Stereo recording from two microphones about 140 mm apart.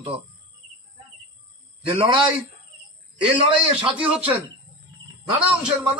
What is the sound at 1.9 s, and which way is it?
Speech, 40° right (ahead or behind).